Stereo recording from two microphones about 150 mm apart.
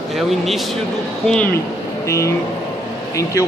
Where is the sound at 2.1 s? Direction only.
20° left (ahead or behind).